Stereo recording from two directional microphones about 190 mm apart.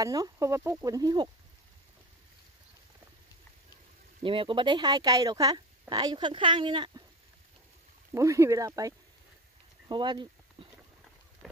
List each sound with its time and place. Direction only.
0.0 s speech: 15° right (ahead or behind)
4.2 s speech: 25° right (ahead or behind)
8.1 s speech: 15° right (ahead or behind)